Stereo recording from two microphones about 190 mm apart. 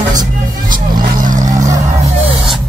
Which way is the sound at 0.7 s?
45° right (ahead or behind).